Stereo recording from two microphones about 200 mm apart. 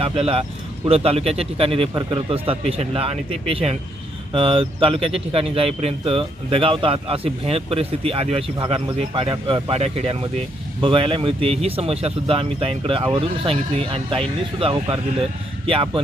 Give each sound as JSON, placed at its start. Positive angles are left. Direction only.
{"t": 0.0, "sound": "speech", "side_deg": -30}